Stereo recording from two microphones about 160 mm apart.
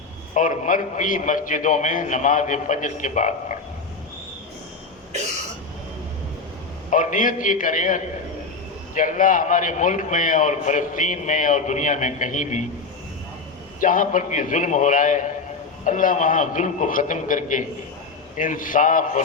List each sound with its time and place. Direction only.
0.3 s a man's voice: 50° left (ahead or behind)
6.9 s a man's voice: 55° left (ahead or behind)
13.7 s a man's voice: 55° left (ahead or behind)